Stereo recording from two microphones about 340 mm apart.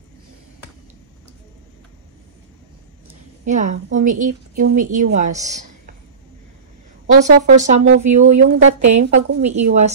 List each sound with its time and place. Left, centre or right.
3.1 s a woman's voice: right
7.2 s a woman's voice: right
8.6 s a woman's voice: right
8.9 s a woman's voice: centre